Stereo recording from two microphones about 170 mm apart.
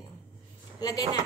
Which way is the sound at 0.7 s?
20° left (ahead or behind).